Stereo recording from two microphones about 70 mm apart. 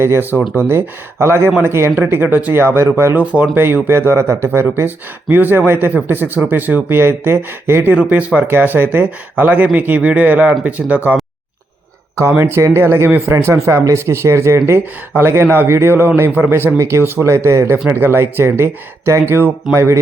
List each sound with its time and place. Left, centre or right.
0.0 s speech: right
3.2 s speech: centre
3.5 s speech: right
7.9 s speech: right
12.5 s speech: right
18.0 s speech: right